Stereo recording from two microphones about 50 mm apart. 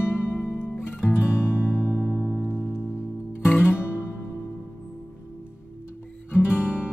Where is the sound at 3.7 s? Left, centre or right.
Left.